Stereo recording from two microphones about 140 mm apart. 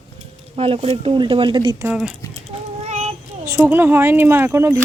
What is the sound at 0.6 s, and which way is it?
Speech, 40° right (ahead or behind).